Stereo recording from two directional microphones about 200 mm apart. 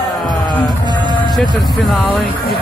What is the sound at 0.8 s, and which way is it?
Music, 20° right (ahead or behind).